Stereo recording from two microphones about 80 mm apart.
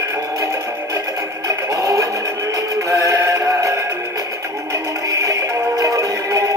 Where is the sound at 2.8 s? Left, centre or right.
Right.